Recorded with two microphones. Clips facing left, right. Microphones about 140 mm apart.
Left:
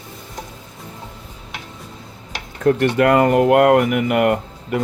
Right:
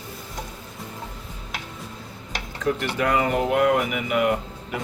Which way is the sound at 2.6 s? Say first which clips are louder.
Left 9 dB; 55° left (ahead or behind).